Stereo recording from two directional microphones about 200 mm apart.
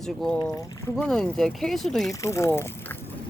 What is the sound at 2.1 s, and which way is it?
Speech, 15° left (ahead or behind).